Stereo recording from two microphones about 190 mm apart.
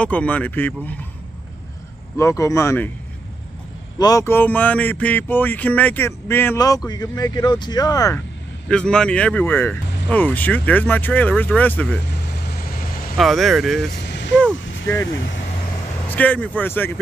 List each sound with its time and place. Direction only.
0.0 s speech: 5° left (ahead or behind)
2.1 s speech: 15° left (ahead or behind)
4.0 s speech: 15° left (ahead or behind)
8.6 s speech: 5° left (ahead or behind)
12.7 s vehicle: 50° left (ahead or behind)
13.2 s speech: centre (ahead or behind)
14.0 s vehicle: 65° left (ahead or behind)
16.1 s speech: 10° left (ahead or behind)